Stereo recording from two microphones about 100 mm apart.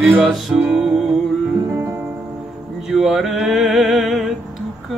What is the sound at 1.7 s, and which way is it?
Music, 25° right (ahead or behind).